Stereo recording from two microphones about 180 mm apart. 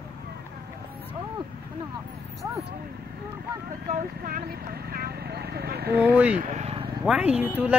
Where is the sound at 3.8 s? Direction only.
50° right (ahead or behind).